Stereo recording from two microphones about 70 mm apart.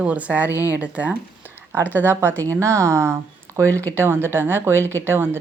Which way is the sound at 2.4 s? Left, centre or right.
Right.